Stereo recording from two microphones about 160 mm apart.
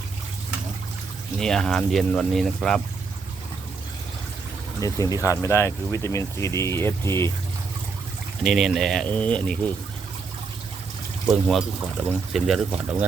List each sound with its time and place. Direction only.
1.4 s speech: 5° left (ahead or behind)
4.8 s speech: 20° left (ahead or behind)
8.4 s speech: centre (ahead or behind)
11.4 s speech: centre (ahead or behind)